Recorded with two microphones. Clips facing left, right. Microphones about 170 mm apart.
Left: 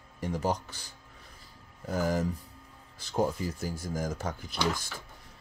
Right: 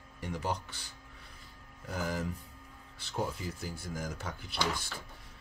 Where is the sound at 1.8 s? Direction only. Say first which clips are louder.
Left 6 dB; 40° left (ahead or behind).